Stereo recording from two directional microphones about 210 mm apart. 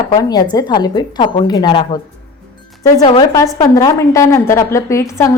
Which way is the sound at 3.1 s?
20° left (ahead or behind).